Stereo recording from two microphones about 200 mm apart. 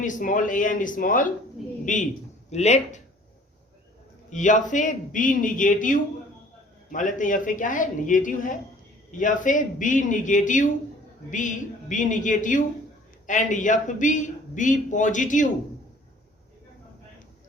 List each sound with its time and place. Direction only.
0.0 s a man's voice: 40° left (ahead or behind)
4.3 s a man's voice: 40° left (ahead or behind)